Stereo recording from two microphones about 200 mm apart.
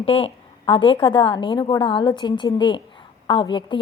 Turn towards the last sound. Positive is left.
turn(degrees=25)  # may be behind; listen again after turning